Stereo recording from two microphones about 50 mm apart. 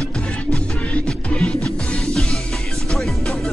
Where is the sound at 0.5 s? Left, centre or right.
Left.